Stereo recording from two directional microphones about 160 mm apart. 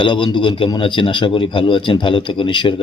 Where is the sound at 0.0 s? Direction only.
30° left (ahead or behind).